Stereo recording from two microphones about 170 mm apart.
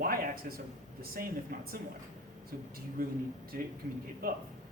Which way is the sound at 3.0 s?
60° right (ahead or behind).